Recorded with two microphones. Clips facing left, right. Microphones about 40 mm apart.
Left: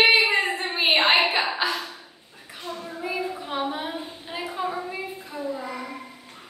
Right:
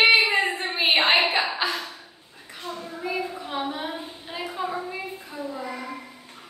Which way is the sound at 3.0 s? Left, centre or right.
Centre.